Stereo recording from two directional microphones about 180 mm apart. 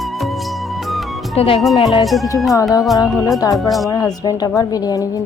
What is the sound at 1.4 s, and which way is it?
Speech, 30° left (ahead or behind).